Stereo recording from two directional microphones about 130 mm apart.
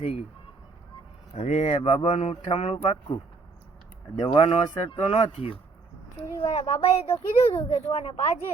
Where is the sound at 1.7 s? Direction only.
45° left (ahead or behind).